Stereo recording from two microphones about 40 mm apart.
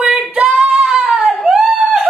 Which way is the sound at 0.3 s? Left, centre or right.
Right.